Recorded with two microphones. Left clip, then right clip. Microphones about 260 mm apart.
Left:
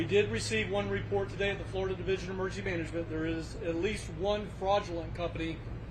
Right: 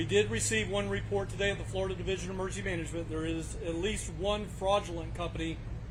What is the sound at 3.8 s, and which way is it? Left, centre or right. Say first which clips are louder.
A man's voice: right 1 dB; right.